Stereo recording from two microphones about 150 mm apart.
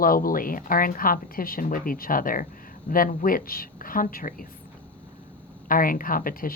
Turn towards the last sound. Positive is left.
turn(degrees=70)  # may be behind; listen again after turning